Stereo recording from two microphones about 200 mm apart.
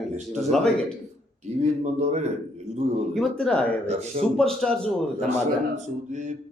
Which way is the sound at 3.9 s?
30° right (ahead or behind).